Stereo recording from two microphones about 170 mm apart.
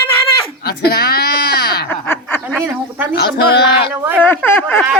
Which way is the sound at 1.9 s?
10° left (ahead or behind).